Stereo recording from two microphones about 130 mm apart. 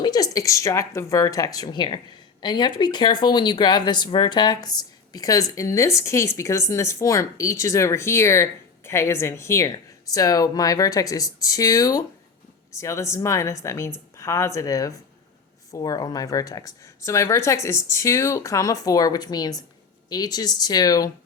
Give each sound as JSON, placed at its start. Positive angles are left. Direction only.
{"t": 0.0, "sound": "speech", "side_deg": 30}